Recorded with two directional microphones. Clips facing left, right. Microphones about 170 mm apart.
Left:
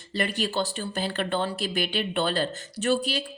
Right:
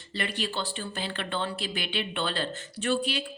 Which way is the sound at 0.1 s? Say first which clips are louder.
Left 5 dB; 45° left (ahead or behind).